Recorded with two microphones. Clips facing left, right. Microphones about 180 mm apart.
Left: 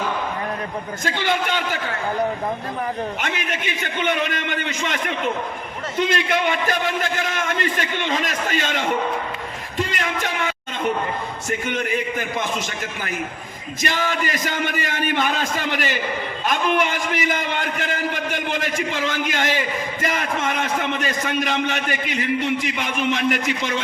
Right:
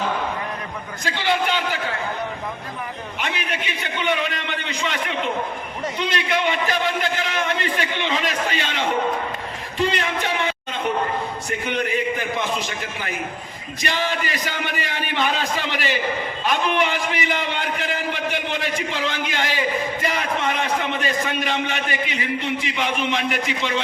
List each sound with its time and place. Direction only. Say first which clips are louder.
1.2 s a man's voice: right 2 dB; 45° left (ahead or behind)
3.2 s a man's voice: left 1 dB; 45° left (ahead or behind)
9.7 s a sound: right 3 dB; 45° left (ahead or behind)
11.4 s a man's voice: left 3 dB; 45° left (ahead or behind)